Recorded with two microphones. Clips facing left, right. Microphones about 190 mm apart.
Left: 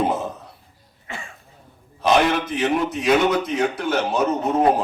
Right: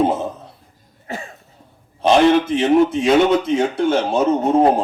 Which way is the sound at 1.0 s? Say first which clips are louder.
Right 6 dB; 40° right (ahead or behind).